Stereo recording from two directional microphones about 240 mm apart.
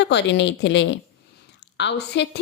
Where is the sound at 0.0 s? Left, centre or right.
Left.